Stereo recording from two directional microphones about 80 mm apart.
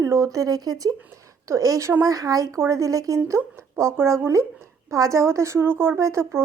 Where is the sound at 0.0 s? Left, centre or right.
Right.